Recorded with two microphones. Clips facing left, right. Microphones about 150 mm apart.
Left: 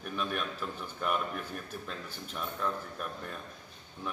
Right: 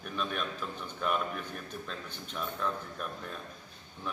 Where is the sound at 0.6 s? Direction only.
5° left (ahead or behind).